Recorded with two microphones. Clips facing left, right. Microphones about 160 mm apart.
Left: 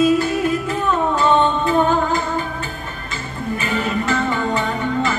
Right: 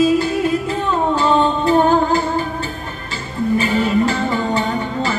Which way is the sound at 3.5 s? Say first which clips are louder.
Right 6 dB; 30° right (ahead or behind).